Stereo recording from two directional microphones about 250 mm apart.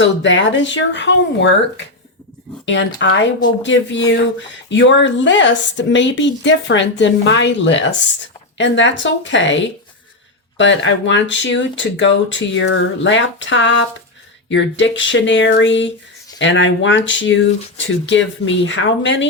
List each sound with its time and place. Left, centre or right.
0.0 s speech: left